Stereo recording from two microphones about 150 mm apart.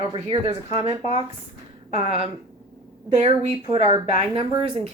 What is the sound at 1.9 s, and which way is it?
Speech, 40° right (ahead or behind).